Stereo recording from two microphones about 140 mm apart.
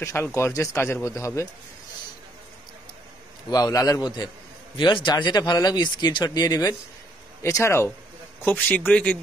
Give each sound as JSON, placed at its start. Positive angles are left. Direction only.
{"t": 0.0, "sound": "speech", "side_deg": 20}
{"t": 3.4, "sound": "a man's voice", "side_deg": 25}